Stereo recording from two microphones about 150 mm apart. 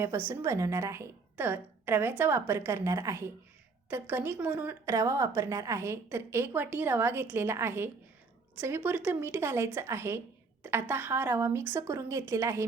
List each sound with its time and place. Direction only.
0.3 s a woman's voice: 20° right (ahead or behind)